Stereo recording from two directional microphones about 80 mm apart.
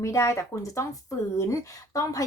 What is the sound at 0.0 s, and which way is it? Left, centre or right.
Speech, left.